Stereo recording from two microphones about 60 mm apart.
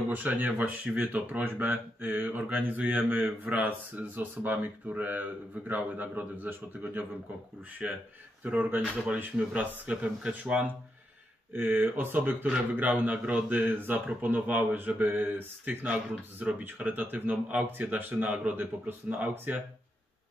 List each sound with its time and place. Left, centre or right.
0.1 s a man's voice: right
7.8 s speech: centre
8.5 s speech: right
11.5 s a man's voice: right